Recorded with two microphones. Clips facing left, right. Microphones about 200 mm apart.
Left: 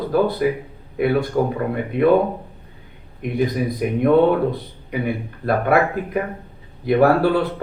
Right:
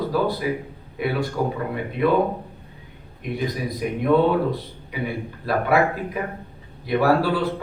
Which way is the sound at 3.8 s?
55° left (ahead or behind).